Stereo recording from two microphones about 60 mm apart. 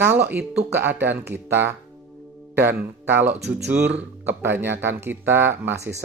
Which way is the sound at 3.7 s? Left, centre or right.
Right.